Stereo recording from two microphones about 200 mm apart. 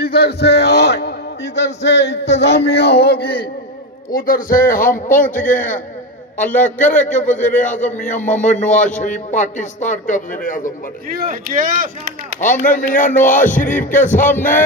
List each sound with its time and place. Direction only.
0.0 s a man's voice: 55° left (ahead or behind)
6.6 s a man's voice: 40° left (ahead or behind)
11.1 s speech: 45° right (ahead or behind)
12.4 s a man's voice: 40° left (ahead or behind)